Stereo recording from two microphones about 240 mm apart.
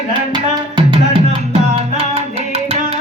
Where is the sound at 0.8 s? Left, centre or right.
Right.